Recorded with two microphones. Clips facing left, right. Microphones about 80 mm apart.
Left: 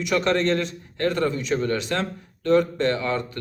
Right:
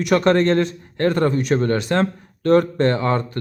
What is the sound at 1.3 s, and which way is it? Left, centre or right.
Speech, right.